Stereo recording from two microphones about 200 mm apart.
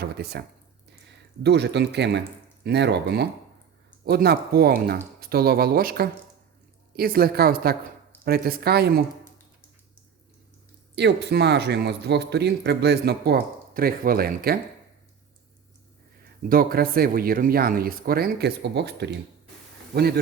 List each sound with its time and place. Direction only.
0.0 s speech: 55° right (ahead or behind)
10.9 s speech: 60° right (ahead or behind)
16.5 s speech: 45° right (ahead or behind)